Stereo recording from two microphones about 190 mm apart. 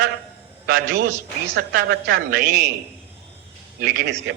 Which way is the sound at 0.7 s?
50° right (ahead or behind).